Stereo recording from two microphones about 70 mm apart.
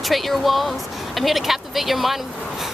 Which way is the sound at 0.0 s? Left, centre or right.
Centre.